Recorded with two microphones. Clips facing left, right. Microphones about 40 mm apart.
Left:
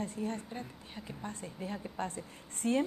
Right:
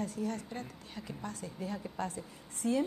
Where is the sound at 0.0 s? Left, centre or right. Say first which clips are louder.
Right 1 dB; left.